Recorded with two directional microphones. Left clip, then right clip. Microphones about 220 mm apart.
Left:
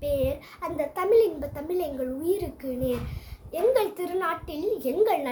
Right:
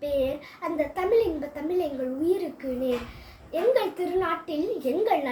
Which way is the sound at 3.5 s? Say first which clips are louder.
Even; 20° left (ahead or behind).